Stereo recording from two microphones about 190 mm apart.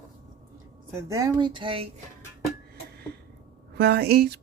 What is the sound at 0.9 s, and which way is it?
Speech, 15° right (ahead or behind).